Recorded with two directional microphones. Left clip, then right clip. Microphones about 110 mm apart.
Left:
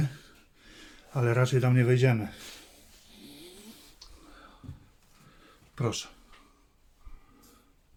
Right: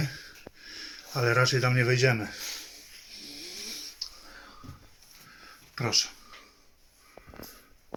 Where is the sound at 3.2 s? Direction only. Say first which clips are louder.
Right 8 dB; 20° left (ahead or behind).